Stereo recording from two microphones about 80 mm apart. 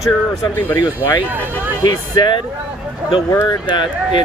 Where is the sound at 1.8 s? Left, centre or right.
Left.